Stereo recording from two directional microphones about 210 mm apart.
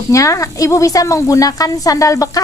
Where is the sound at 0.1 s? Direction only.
15° left (ahead or behind).